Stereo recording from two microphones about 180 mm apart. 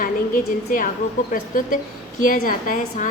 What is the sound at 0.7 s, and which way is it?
A woman's voice, 50° left (ahead or behind).